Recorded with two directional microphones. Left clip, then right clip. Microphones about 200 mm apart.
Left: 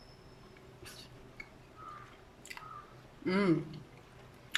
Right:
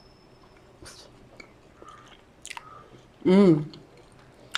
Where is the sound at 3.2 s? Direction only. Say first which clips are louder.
Right 12 dB; 35° right (ahead or behind).